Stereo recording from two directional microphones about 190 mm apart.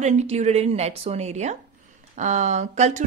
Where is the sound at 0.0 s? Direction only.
35° right (ahead or behind).